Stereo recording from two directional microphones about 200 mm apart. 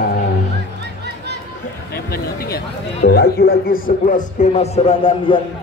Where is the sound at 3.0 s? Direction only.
55° left (ahead or behind).